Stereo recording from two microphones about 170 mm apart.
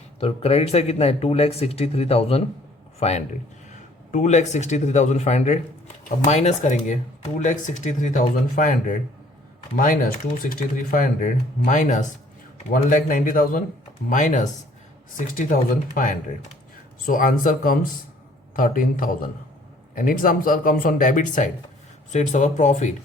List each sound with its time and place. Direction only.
0.2 s a man's voice: 35° left (ahead or behind)